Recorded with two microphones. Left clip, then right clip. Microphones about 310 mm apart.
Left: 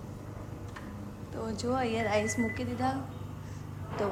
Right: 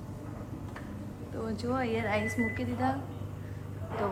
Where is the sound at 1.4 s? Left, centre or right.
Centre.